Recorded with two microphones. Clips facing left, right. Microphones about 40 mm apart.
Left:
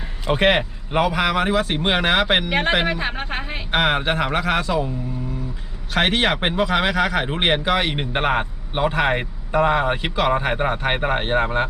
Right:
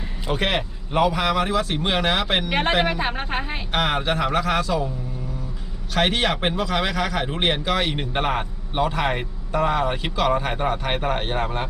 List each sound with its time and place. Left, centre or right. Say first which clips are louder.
0.3 s speech: left 6 dB; left
2.5 s a woman's voice: left 1 dB; centre
3.7 s speech: left 3 dB; left
5.9 s speech: left 2 dB; left